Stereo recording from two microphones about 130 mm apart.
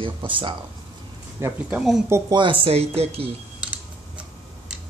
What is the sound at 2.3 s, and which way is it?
Speech, 40° right (ahead or behind).